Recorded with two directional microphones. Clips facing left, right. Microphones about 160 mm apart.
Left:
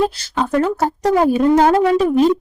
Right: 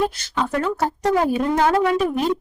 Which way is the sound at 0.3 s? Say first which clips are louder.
Left 5 dB; 40° left (ahead or behind).